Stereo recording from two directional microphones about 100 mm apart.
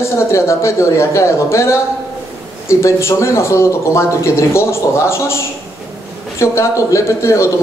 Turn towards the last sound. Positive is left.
turn(degrees=30)  # may be behind; listen again after turning